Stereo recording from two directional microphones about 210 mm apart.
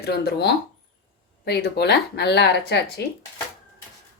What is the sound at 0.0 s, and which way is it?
Speech, 50° left (ahead or behind).